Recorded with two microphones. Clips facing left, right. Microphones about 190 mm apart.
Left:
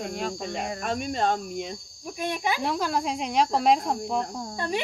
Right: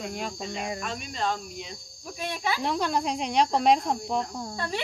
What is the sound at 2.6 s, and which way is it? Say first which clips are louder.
Speech: right 3 dB; 5° left (ahead or behind).